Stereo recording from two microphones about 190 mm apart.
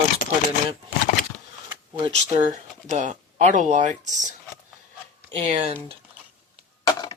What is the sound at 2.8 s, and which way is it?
Speech, 40° right (ahead or behind).